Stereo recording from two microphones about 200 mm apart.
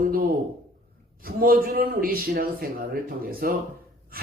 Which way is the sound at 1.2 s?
45° right (ahead or behind).